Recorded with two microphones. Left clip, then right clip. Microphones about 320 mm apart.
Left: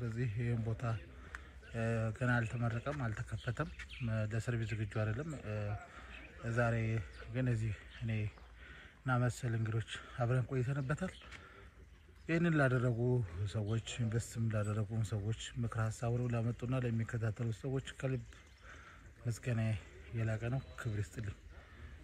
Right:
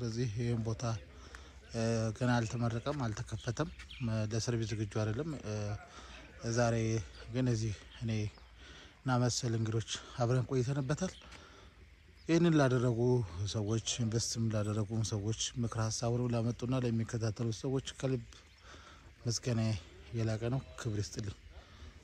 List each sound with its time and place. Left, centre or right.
0.0 s a man's voice: centre
12.9 s speech: right
13.4 s a man's voice: centre
14.1 s speech: centre
14.5 s a man's voice: centre
19.2 s a man's voice: centre